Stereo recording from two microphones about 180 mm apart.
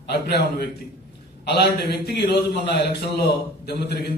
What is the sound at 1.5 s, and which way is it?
A man's voice, 65° left (ahead or behind).